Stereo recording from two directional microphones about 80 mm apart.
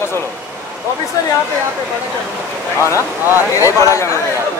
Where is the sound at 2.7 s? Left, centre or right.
Left.